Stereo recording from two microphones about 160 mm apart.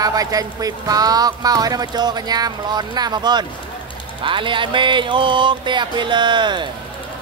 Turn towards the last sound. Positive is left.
turn(degrees=-30)  # may be behind; listen again after turning